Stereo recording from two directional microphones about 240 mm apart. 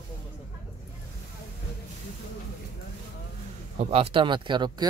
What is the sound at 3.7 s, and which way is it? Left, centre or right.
A man's voice, right.